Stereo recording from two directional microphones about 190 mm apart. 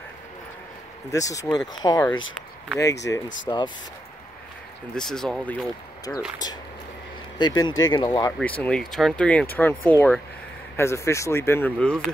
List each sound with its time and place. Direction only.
1.1 s speech: 15° left (ahead or behind)
3.1 s speech: 15° left (ahead or behind)
4.9 s speech: centre (ahead or behind)
7.3 s speech: 25° left (ahead or behind)
8.3 s speech: 5° left (ahead or behind)